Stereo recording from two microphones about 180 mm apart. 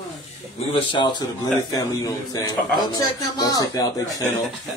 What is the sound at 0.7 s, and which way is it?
Speech, 25° left (ahead or behind).